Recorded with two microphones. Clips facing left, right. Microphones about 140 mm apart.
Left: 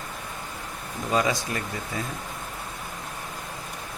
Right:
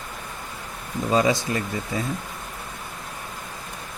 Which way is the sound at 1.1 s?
25° right (ahead or behind).